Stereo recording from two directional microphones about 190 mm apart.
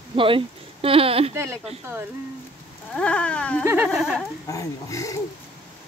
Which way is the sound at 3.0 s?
5° left (ahead or behind).